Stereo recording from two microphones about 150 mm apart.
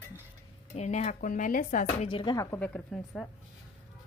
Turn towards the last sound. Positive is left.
turn(degrees=0)  # may be behind; listen again after turning